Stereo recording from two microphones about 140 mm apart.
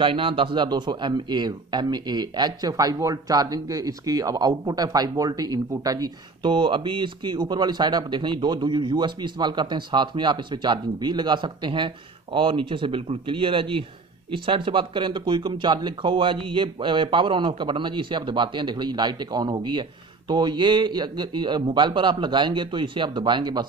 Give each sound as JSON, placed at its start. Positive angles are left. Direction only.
{"t": 0.0, "sound": "a man's voice", "side_deg": -40}